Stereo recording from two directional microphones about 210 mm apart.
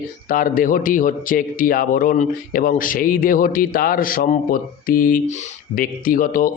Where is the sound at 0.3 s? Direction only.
40° left (ahead or behind).